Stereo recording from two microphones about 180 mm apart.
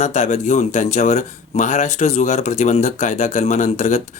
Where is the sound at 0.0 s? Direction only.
40° left (ahead or behind).